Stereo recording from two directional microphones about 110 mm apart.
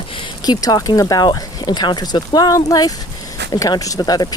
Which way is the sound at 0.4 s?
40° left (ahead or behind).